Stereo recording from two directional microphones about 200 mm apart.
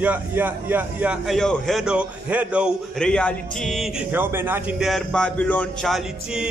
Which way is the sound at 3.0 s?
5° left (ahead or behind).